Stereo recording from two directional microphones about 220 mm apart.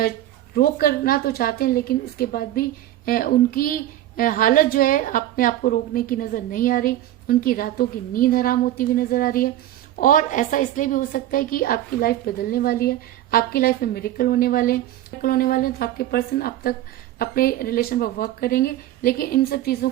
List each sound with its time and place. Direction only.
0.5 s a woman's voice: 45° left (ahead or behind)